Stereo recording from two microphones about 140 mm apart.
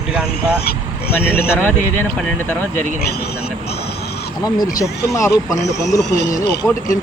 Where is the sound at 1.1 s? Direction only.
15° left (ahead or behind).